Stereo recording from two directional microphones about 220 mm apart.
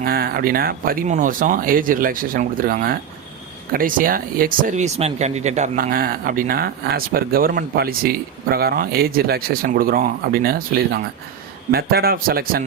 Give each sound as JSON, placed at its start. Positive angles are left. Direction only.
{"t": 0.0, "sound": "a man's voice", "side_deg": -45}